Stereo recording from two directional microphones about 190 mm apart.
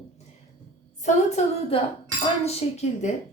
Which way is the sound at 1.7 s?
30° left (ahead or behind).